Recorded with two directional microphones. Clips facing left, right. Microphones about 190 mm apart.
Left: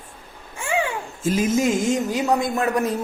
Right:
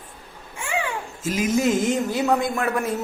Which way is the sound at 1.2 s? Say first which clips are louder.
Left 3 dB; 30° left (ahead or behind).